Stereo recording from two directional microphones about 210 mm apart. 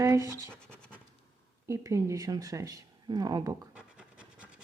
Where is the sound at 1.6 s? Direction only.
15° right (ahead or behind).